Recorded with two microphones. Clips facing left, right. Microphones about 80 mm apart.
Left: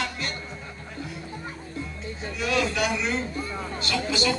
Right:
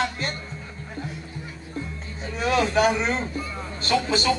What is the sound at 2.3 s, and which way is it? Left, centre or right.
Speech, right.